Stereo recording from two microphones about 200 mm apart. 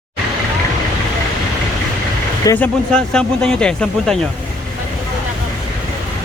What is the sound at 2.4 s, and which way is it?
Speech, 15° left (ahead or behind).